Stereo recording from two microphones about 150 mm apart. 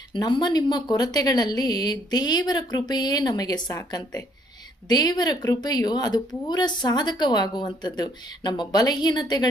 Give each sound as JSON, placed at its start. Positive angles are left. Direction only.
{"t": 0.1, "sound": "a woman's voice", "side_deg": 30}